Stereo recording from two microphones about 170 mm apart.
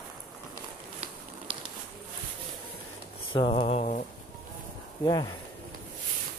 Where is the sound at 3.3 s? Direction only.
35° left (ahead or behind).